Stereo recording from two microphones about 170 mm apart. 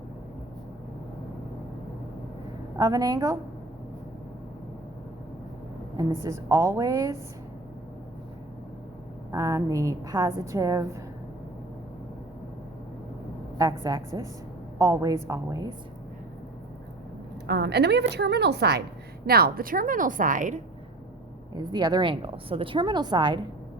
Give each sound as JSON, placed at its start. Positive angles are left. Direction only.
{"t": 2.7, "sound": "a woman's voice", "side_deg": -20}
{"t": 6.0, "sound": "a woman's voice", "side_deg": -15}
{"t": 9.3, "sound": "a woman's voice", "side_deg": -20}
{"t": 13.6, "sound": "a woman's voice", "side_deg": -20}
{"t": 17.4, "sound": "a woman's voice", "side_deg": -80}
{"t": 19.2, "sound": "a woman's voice", "side_deg": -65}
{"t": 21.5, "sound": "a woman's voice", "side_deg": -25}